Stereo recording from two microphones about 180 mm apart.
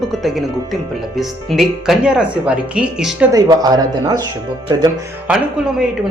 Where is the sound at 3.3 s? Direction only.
20° right (ahead or behind).